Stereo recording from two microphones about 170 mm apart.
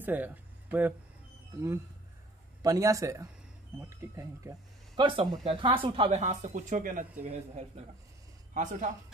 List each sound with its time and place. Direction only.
0.0 s speech: 10° right (ahead or behind)
2.6 s a man's voice: 20° right (ahead or behind)
5.0 s speech: 30° right (ahead or behind); by 7.1 s 50° right (ahead or behind)
7.2 s speech: 40° right (ahead or behind)